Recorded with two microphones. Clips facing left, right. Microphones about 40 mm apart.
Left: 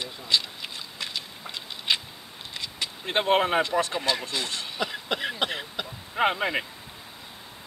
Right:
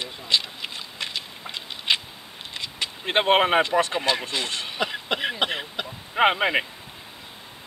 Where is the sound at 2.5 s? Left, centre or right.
Right.